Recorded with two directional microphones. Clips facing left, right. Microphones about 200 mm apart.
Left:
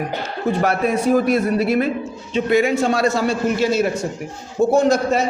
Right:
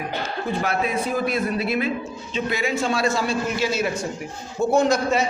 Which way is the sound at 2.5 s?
55° left (ahead or behind).